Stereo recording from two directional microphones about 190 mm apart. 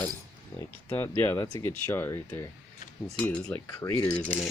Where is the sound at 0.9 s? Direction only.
15° left (ahead or behind).